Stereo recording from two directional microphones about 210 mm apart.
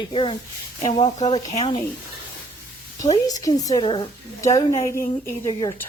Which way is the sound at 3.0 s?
15° left (ahead or behind).